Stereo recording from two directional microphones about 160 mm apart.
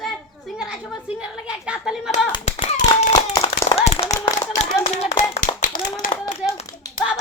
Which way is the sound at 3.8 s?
40° left (ahead or behind).